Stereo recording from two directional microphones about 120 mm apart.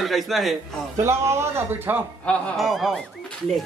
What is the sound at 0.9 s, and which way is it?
Speech, 25° right (ahead or behind).